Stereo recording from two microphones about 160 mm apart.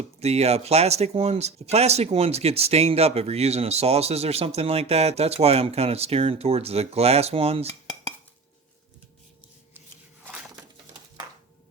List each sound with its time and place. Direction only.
0.2 s speech: 40° right (ahead or behind)